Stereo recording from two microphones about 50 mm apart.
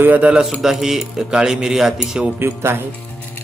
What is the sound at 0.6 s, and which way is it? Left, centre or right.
Speech, centre.